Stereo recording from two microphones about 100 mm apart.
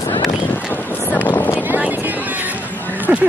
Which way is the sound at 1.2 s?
20° left (ahead or behind).